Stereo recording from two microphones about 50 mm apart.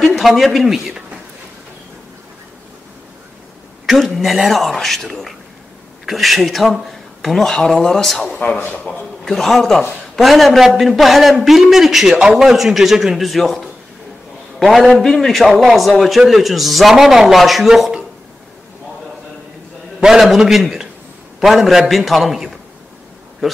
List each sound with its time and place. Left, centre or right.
0.0 s a man's voice: centre
4.0 s a man's voice: centre
8.6 s a man's voice: left
9.2 s a man's voice: centre
20.0 s a man's voice: centre